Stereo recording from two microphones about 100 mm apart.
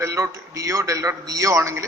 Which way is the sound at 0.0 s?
30° right (ahead or behind).